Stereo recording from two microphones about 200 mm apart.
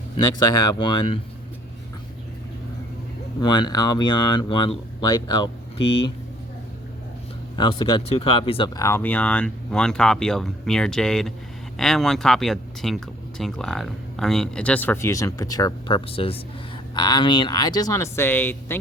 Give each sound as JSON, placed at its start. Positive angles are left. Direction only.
{"t": 0.2, "sound": "speech", "side_deg": 20}
{"t": 3.4, "sound": "speech", "side_deg": 20}
{"t": 7.5, "sound": "speech", "side_deg": 25}